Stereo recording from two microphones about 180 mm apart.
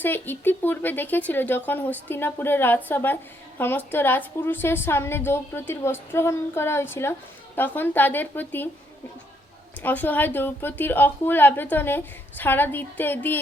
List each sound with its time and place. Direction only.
0.0 s a woman's voice: 10° left (ahead or behind)
9.8 s a woman's voice: 10° left (ahead or behind)